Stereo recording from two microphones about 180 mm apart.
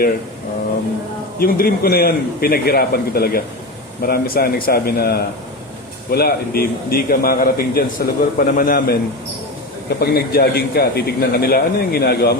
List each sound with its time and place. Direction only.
1.4 s a man's voice: 55° left (ahead or behind)
10.0 s a man's voice: 60° left (ahead or behind)